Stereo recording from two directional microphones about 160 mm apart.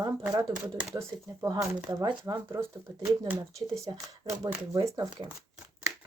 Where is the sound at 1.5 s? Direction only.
25° right (ahead or behind).